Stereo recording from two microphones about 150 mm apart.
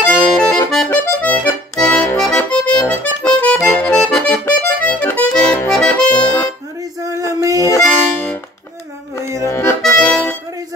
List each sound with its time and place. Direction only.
0.0 s accordion: 5° left (ahead or behind)
7.4 s harmonica: 25° right (ahead or behind)
7.8 s music: 5° left (ahead or behind)
9.2 s accordion: 20° right (ahead or behind)
9.5 s accordion: 15° left (ahead or behind)
9.8 s music: 5° left (ahead or behind)